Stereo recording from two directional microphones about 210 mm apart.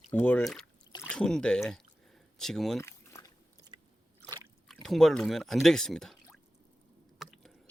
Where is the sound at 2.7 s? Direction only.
15° left (ahead or behind).